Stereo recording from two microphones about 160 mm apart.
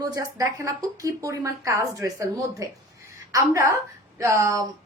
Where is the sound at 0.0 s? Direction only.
20° right (ahead or behind).